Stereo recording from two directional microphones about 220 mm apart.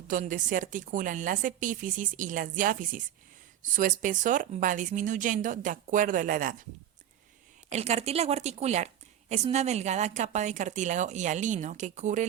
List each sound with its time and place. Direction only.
0.1 s a woman's voice: 35° right (ahead or behind)
7.7 s a woman's voice: 30° right (ahead or behind)